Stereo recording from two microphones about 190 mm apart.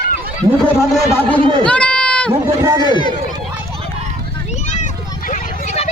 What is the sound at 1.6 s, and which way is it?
Run, 5° left (ahead or behind).